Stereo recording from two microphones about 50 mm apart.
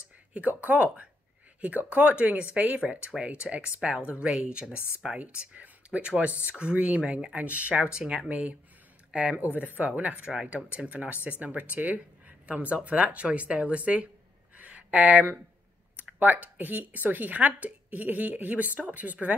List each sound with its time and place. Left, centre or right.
0.3 s speech: right
7.8 s speech: centre
8.3 s speech: right
9.4 s speech: right
14.6 s a sound: right
16.2 s speech: right